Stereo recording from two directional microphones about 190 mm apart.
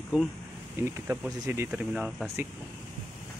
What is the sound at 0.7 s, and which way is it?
Speech, 15° right (ahead or behind).